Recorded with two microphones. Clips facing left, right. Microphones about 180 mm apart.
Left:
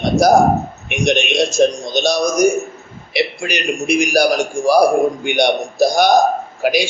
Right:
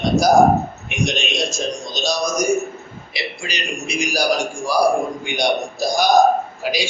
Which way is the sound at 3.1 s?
60° left (ahead or behind).